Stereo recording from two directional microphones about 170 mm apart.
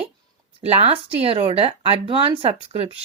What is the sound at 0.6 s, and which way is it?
Speech, 35° right (ahead or behind).